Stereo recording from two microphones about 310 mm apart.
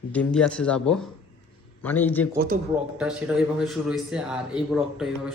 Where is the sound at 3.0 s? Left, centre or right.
Centre.